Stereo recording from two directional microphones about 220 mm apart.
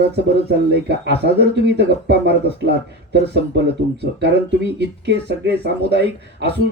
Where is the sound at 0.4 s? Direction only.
50° right (ahead or behind).